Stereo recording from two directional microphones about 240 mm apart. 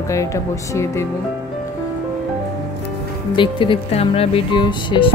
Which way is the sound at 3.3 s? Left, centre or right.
Left.